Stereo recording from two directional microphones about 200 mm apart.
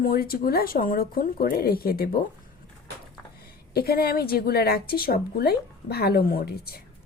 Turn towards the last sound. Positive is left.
turn(degrees=50)  # may be behind; listen again after turning